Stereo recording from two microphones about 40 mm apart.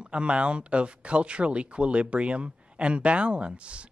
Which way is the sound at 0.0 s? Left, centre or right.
Right.